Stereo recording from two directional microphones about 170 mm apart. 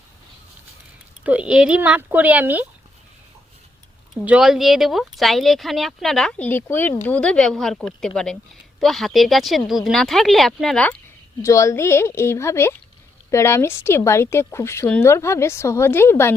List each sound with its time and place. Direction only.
1.2 s speech: 10° right (ahead or behind)
4.3 s speech: 5° right (ahead or behind)
11.4 s speech: 15° left (ahead or behind)